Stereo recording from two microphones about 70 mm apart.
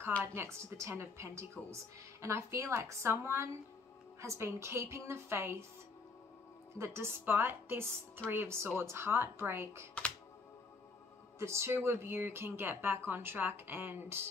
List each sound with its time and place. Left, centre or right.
0.3 s a woman's voice: right
6.8 s speech: right
7.2 s a woman's voice: right
11.3 s speech: right